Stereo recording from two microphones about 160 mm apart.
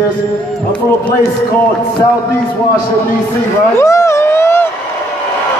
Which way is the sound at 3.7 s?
20° left (ahead or behind).